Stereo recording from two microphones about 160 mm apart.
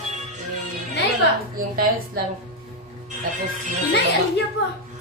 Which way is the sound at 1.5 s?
60° right (ahead or behind).